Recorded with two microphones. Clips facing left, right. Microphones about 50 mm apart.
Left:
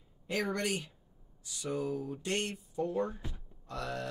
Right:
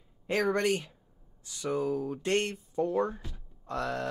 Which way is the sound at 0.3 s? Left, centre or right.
Right.